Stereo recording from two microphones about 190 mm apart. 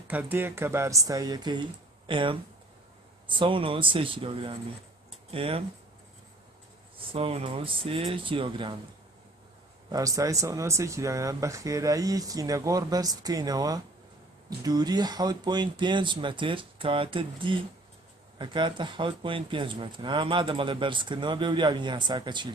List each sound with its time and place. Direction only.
0.1 s speech: 10° right (ahead or behind); by 5.6 s 30° right (ahead or behind)
7.0 s speech: 30° right (ahead or behind)
9.8 s speech: 20° right (ahead or behind)